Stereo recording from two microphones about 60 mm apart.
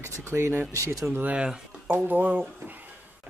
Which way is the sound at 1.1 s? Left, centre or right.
Right.